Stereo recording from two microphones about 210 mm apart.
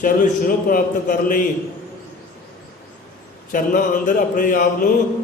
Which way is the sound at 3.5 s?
40° left (ahead or behind).